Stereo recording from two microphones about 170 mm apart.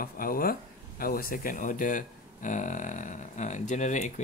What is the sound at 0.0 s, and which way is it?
Speech, 55° left (ahead or behind).